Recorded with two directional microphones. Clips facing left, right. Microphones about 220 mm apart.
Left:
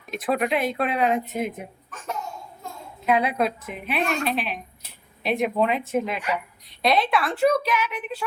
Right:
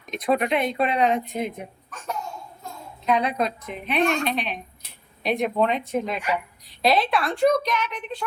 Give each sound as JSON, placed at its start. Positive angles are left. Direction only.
{"t": 0.1, "sound": "a woman's voice", "side_deg": 5}
{"t": 3.1, "sound": "a woman's voice", "side_deg": 5}